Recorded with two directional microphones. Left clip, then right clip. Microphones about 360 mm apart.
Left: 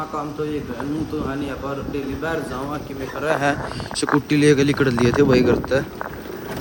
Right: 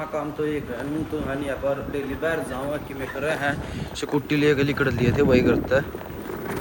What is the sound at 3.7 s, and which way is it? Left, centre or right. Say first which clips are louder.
A man's voice: left 6 dB; centre.